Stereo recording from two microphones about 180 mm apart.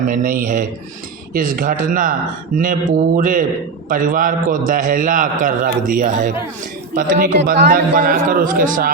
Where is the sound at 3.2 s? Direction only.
50° right (ahead or behind).